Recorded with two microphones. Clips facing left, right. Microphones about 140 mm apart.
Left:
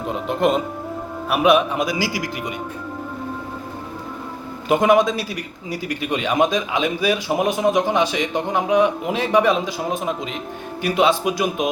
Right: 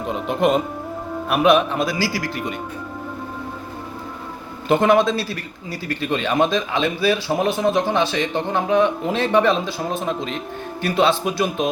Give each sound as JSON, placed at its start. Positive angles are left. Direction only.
{"t": 0.0, "sound": "a man's voice", "side_deg": 0}
{"t": 4.7, "sound": "a man's voice", "side_deg": 10}